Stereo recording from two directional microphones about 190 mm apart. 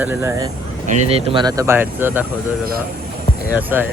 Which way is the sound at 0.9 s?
30° right (ahead or behind).